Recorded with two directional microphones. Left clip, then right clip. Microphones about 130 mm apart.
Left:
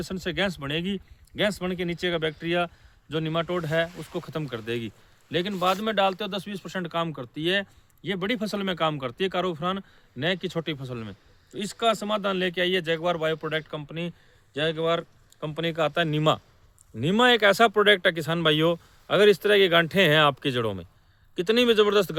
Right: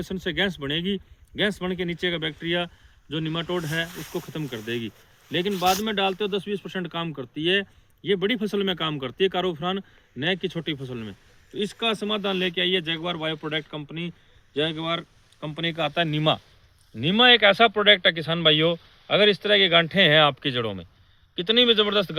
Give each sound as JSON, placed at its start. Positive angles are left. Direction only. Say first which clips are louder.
{"t": 0.1, "sound": "a man's voice", "louder": "right 2 dB", "side_deg": 35}